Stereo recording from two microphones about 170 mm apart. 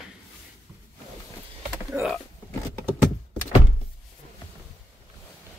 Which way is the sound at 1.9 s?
5° right (ahead or behind).